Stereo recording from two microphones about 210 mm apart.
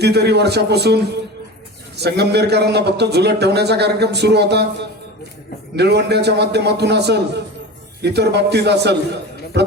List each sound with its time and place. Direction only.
0.0 s a man's voice: 50° right (ahead or behind)